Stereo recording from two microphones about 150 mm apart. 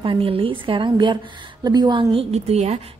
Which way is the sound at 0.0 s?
35° right (ahead or behind).